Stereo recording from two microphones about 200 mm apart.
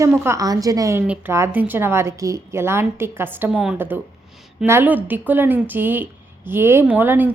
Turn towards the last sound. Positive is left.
turn(degrees=-10)  # may be behind; listen again after turning